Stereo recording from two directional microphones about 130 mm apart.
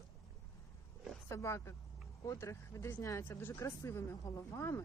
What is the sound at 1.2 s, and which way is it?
Speech, 20° left (ahead or behind).